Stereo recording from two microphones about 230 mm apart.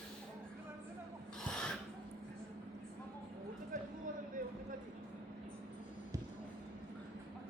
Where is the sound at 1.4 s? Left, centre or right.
Centre.